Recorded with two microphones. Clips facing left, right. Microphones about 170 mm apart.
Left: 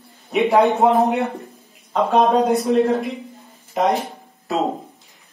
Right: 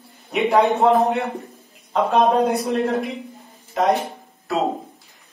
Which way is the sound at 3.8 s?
20° left (ahead or behind).